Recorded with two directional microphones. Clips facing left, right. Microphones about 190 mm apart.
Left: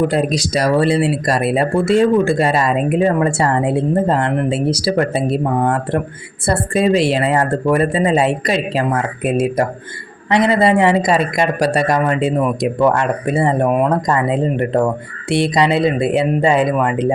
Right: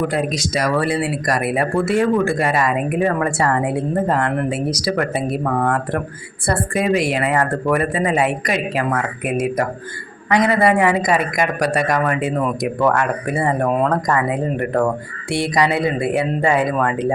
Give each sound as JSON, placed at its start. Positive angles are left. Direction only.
{"t": 0.1, "sound": "speech", "side_deg": 35}